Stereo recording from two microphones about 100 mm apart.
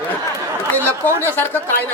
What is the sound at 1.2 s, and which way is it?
Speech, 20° left (ahead or behind).